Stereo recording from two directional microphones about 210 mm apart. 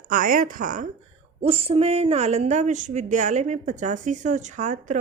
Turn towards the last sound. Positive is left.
turn(degrees=-35)  # may be behind; listen again after turning